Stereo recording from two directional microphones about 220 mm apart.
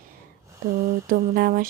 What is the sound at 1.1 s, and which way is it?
Speech, 40° right (ahead or behind).